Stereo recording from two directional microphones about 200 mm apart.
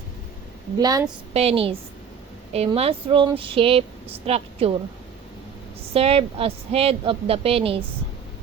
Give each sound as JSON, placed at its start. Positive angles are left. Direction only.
{"t": 0.8, "sound": "a woman's voice", "side_deg": -20}
{"t": 1.3, "sound": "a woman's voice", "side_deg": -30}
{"t": 5.9, "sound": "a woman's voice", "side_deg": -30}